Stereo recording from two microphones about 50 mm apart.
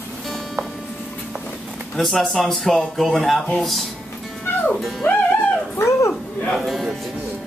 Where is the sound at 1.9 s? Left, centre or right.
Centre.